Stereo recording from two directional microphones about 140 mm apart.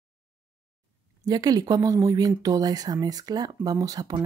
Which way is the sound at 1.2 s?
25° right (ahead or behind).